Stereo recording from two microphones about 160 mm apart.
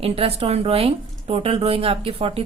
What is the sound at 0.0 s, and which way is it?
A woman's voice, 35° right (ahead or behind).